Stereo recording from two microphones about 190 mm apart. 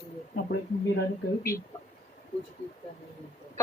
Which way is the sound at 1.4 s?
15° left (ahead or behind).